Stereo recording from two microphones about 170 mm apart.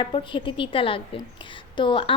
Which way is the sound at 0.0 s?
30° left (ahead or behind).